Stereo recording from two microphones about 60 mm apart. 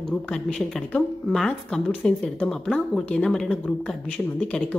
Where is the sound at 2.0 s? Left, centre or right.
Left.